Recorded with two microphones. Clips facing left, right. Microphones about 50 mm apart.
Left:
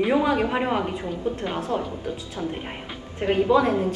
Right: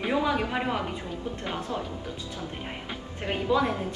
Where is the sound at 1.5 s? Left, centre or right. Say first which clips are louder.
Left 6 dB; left.